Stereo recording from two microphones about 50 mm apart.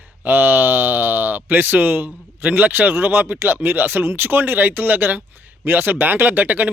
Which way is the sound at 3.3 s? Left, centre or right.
Right.